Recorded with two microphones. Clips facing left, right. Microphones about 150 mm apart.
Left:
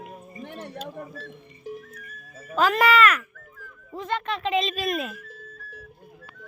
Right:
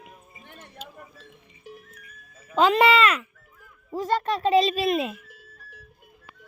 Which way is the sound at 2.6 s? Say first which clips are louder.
Right 1 dB; 25° right (ahead or behind).